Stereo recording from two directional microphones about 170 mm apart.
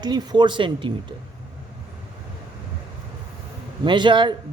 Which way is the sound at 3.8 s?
30° right (ahead or behind).